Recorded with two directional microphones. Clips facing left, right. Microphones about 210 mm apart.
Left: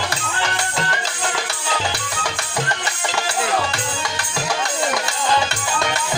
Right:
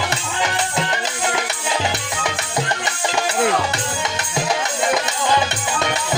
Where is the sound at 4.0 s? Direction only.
20° right (ahead or behind).